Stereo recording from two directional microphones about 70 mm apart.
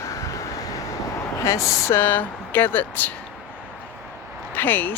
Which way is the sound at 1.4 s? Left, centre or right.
Left.